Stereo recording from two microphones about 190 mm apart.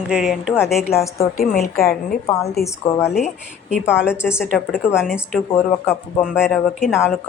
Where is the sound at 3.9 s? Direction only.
5° right (ahead or behind).